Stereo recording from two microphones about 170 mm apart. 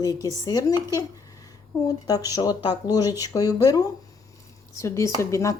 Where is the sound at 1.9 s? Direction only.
20° left (ahead or behind).